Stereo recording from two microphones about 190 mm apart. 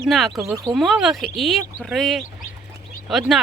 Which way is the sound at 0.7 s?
Centre (ahead or behind).